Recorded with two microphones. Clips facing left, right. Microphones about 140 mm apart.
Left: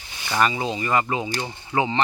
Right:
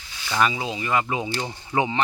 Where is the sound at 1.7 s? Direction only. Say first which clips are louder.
Even; 5° right (ahead or behind).